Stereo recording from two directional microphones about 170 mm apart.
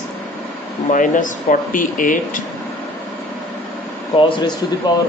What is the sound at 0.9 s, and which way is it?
Speech, 50° left (ahead or behind).